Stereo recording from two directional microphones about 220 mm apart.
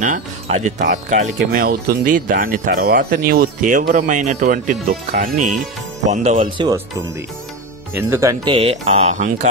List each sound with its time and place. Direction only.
0.0 s speech: 35° right (ahead or behind)
7.9 s speech: 10° right (ahead or behind)
8.5 s speech: 30° right (ahead or behind)